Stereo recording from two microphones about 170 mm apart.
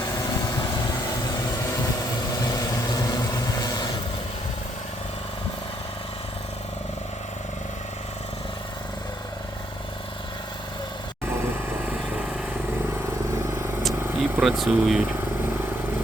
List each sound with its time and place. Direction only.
2.5 s vehicle: 20° left (ahead or behind)
14.1 s speech: 5° right (ahead or behind)